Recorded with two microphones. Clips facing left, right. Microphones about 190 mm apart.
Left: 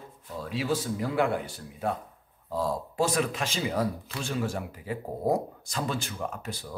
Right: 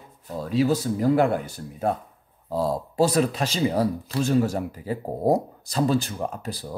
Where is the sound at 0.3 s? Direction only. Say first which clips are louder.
Right 7 dB; 40° right (ahead or behind).